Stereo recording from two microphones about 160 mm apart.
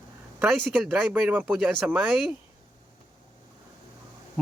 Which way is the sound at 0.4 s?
Centre (ahead or behind).